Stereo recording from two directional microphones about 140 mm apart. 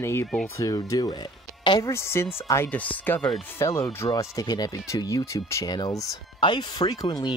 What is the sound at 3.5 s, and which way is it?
Speech, 20° left (ahead or behind).